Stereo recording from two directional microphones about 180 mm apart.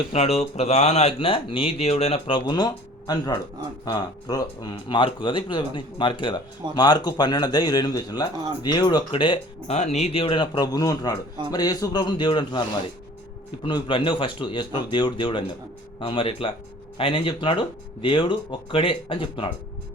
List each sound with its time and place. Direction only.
0.1 s speech: 35° left (ahead or behind)
9.7 s speech: 40° left (ahead or behind)
13.7 s speech: 25° left (ahead or behind)